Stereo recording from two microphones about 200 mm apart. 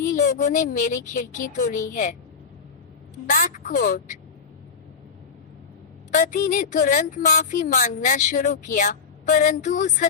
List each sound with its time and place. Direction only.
0.2 s a woman's voice: 40° left (ahead or behind)
3.2 s a woman's voice: 40° left (ahead or behind)
6.1 s a woman's voice: 40° left (ahead or behind)